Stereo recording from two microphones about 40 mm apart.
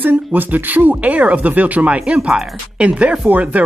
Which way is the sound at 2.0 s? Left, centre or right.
Right.